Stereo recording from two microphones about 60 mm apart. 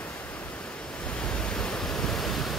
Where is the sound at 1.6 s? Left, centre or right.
Centre.